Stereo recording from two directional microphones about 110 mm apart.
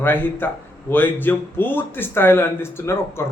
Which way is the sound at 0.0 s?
20° left (ahead or behind).